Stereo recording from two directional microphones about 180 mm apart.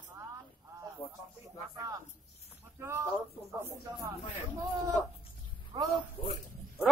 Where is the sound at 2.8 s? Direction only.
15° right (ahead or behind).